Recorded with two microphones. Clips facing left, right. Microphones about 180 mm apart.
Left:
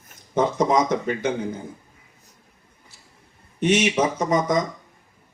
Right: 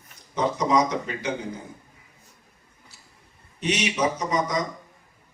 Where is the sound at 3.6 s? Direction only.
50° left (ahead or behind).